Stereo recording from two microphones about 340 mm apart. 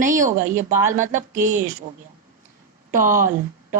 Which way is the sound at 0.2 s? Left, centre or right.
Right.